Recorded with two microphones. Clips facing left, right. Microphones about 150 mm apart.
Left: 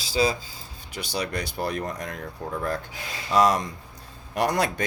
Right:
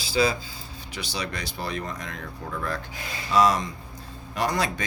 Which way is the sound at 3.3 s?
60° left (ahead or behind).